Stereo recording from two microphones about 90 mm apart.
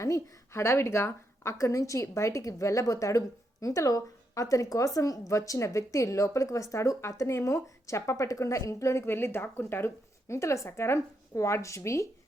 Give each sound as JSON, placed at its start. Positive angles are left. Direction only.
{"t": 0.0, "sound": "a woman's voice", "side_deg": 35}